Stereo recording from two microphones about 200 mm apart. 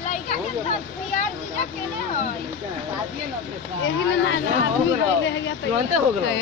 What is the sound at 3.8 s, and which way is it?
Speech, 70° left (ahead or behind).